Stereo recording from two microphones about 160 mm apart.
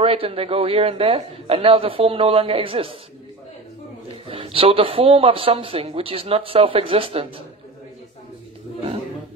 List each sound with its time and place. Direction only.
0.0 s speech: 35° right (ahead or behind)
4.3 s speech: 35° right (ahead or behind)